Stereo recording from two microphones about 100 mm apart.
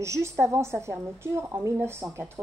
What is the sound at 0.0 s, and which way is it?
Speech, 30° right (ahead or behind).